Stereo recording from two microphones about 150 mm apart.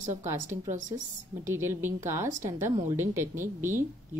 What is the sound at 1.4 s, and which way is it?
Speech, 15° right (ahead or behind).